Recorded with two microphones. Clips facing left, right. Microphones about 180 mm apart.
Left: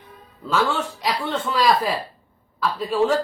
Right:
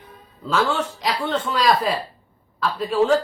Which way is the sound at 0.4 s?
Centre (ahead or behind).